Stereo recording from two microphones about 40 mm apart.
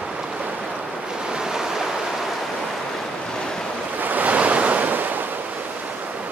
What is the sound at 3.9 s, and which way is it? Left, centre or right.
Waves, right.